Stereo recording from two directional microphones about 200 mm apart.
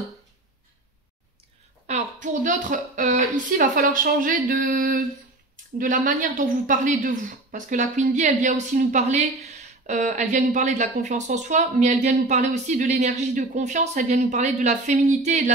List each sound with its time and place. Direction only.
1.9 s a woman's voice: 35° right (ahead or behind)